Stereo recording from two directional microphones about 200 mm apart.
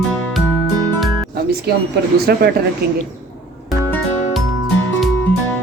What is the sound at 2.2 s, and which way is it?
Speech, 50° right (ahead or behind).